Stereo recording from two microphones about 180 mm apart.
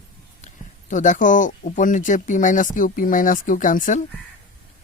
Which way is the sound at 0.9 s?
45° left (ahead or behind).